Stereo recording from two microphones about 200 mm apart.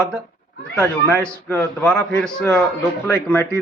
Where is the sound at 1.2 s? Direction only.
5° left (ahead or behind).